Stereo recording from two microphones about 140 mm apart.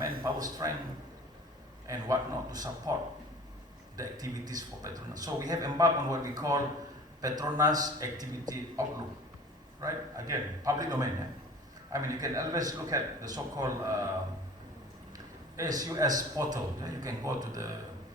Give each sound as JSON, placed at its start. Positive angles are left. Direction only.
{"t": 0.2, "sound": "a sound", "side_deg": -25}
{"t": 1.9, "sound": "speech", "side_deg": -25}
{"t": 3.9, "sound": "speech", "side_deg": -25}
{"t": 9.8, "sound": "speech", "side_deg": -25}
{"t": 15.5, "sound": "speech", "side_deg": -25}